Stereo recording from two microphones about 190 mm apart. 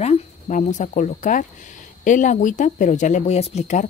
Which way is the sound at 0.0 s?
40° left (ahead or behind).